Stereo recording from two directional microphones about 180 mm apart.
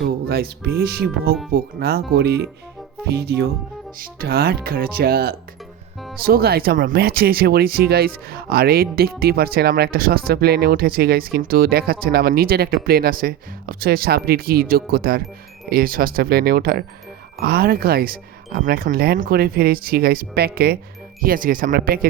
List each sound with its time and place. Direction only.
0.0 s music: 60° right (ahead or behind)
0.8 s speech: 60° right (ahead or behind)